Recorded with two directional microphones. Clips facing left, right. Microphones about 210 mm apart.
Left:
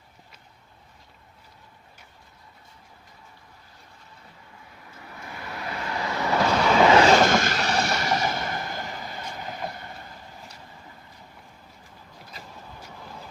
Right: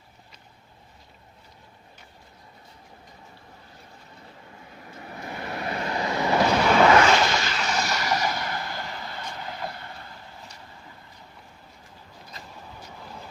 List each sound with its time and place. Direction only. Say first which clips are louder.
4.9 s vehicle: right 5 dB; 40° right (ahead or behind); by 6.7 s 10° right (ahead or behind)
7.0 s vehicle: left 4 dB; 40° left (ahead or behind); by 9.7 s 20° left (ahead or behind)